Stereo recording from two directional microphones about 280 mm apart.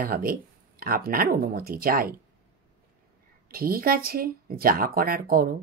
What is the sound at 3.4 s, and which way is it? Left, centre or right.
A woman's voice, right.